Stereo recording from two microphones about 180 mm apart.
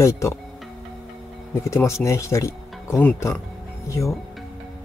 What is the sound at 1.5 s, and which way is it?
Speech, 15° left (ahead or behind).